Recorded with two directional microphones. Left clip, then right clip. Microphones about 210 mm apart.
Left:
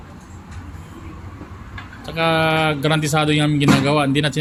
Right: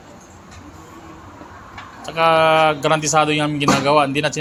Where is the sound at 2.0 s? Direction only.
10° left (ahead or behind).